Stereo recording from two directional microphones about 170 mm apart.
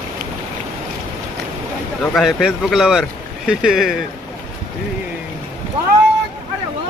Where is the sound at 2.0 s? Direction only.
Centre (ahead or behind).